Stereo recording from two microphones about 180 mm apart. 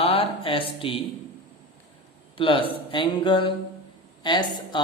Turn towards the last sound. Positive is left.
turn(degrees=25)  # may be behind; listen again after turning